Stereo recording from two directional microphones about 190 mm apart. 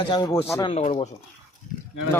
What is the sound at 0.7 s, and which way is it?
Speech, 35° left (ahead or behind).